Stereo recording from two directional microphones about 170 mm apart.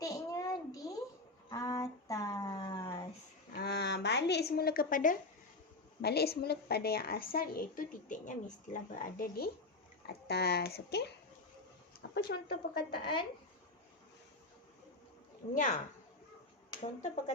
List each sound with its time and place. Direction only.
0.0 s a sound: 20° left (ahead or behind)
3.5 s a sound: 70° left (ahead or behind); by 5.1 s 55° left (ahead or behind)
6.0 s a woman's voice: 70° left (ahead or behind)
12.1 s speech: 70° left (ahead or behind)
15.5 s speech: 45° left (ahead or behind)
16.8 s speech: 40° left (ahead or behind)